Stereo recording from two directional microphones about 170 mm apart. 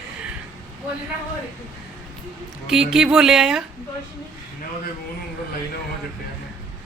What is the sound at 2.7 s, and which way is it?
Speech, 5° right (ahead or behind).